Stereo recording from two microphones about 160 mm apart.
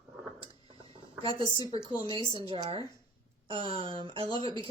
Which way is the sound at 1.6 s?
30° right (ahead or behind).